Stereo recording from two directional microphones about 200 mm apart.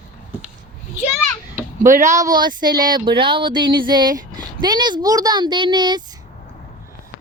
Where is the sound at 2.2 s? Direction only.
20° right (ahead or behind).